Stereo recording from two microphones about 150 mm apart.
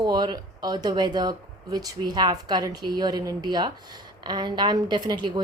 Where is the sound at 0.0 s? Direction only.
30° right (ahead or behind).